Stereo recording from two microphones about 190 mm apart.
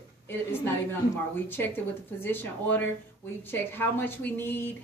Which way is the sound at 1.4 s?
10° left (ahead or behind).